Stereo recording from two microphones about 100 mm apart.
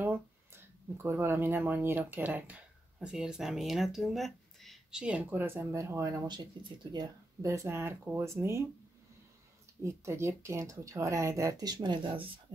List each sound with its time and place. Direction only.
0.0 s speech: 20° right (ahead or behind); by 5.0 s centre (ahead or behind)
5.0 s speech: 15° right (ahead or behind)
6.0 s speech: 45° right (ahead or behind)
7.4 s speech: 25° right (ahead or behind)
9.8 s speech: 30° right (ahead or behind); by 12.3 s 55° right (ahead or behind)